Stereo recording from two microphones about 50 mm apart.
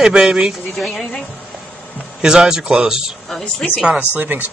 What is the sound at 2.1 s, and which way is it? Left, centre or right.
Speech, centre.